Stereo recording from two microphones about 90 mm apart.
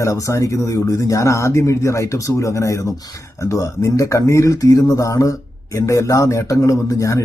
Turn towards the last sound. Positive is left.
turn(degrees=35)  # may be behind; listen again after turning